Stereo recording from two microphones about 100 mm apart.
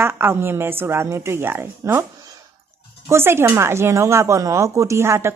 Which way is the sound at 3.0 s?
25° right (ahead or behind).